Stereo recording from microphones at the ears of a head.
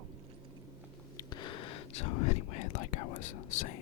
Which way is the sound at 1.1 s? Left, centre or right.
Left.